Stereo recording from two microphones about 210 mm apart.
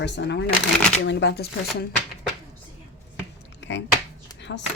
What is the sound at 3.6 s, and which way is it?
Chopping, 60° left (ahead or behind).